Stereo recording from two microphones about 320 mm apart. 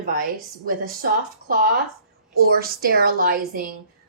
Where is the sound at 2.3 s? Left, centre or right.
Right.